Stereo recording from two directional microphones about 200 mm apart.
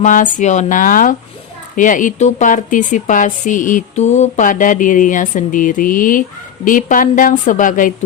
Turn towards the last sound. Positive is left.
turn(degrees=40)  # may be behind; listen again after turning